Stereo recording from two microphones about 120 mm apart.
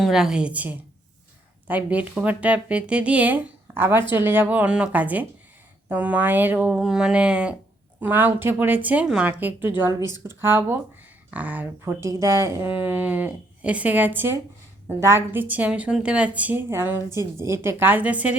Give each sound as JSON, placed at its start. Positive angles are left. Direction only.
{"t": 0.0, "sound": "a woman's voice", "side_deg": -5}